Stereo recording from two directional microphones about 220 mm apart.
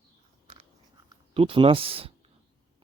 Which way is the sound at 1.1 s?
25° right (ahead or behind).